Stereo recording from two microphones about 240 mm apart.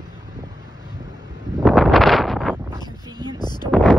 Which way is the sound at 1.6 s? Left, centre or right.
Centre.